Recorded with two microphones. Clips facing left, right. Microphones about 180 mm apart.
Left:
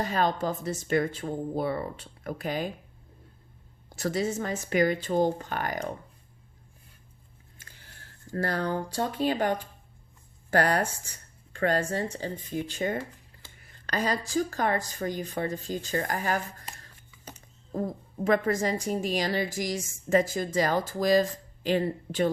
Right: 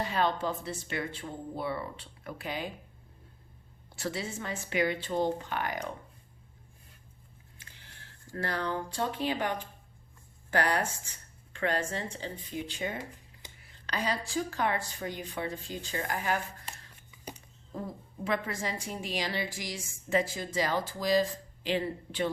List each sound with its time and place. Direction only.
0.0 s speech: 45° left (ahead or behind)
3.9 s speech: 45° left (ahead or behind)
7.6 s a sound: 45° left (ahead or behind)
8.3 s speech: 40° left (ahead or behind)